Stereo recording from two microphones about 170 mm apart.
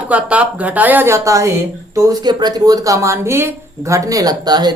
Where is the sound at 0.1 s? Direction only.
10° right (ahead or behind).